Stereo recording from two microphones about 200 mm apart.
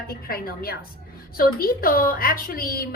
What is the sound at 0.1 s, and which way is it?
A woman's voice, 50° left (ahead or behind).